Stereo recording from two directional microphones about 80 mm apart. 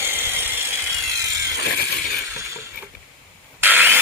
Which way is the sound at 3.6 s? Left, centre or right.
Right.